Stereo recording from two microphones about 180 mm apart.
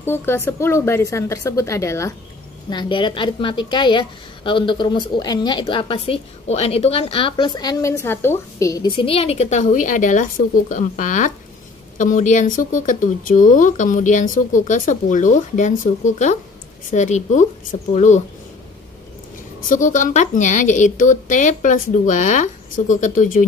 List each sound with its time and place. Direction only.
0.0 s a woman's voice: 15° left (ahead or behind); by 18.2 s 40° left (ahead or behind)
19.7 s speech: 45° left (ahead or behind)